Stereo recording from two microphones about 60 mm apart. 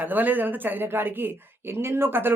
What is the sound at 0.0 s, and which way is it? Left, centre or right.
Speech, right.